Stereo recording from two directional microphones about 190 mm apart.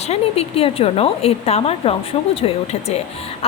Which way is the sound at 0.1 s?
30° left (ahead or behind).